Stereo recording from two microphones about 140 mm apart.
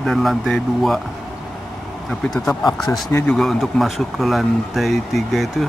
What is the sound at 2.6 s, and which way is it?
Speech, 25° left (ahead or behind).